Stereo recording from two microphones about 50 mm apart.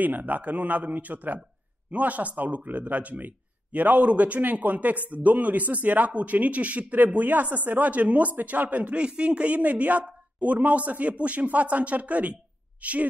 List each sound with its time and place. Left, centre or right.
0.0 s speech: right